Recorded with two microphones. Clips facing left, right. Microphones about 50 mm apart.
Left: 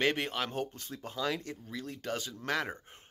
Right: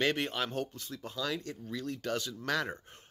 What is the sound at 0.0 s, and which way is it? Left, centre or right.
Speech, left.